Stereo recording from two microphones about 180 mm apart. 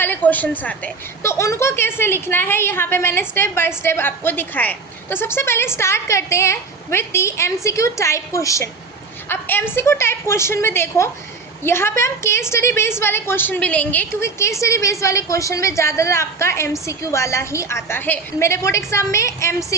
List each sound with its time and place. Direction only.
0.0 s a woman's voice: 10° left (ahead or behind)